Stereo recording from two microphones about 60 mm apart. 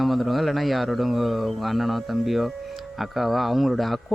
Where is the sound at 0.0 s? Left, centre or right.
Centre.